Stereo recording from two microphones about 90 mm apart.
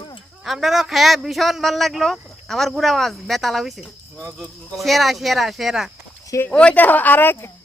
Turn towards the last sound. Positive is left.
turn(degrees=20)  # may be behind; listen again after turning